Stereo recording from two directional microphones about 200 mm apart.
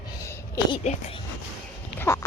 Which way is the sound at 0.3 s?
15° left (ahead or behind).